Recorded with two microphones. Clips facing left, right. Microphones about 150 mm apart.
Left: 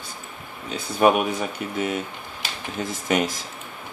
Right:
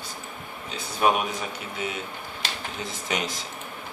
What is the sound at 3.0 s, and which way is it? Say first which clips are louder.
Speech: left 7 dB; 50° left (ahead or behind).